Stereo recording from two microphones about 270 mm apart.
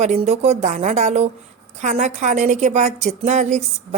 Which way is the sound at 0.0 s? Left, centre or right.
Right.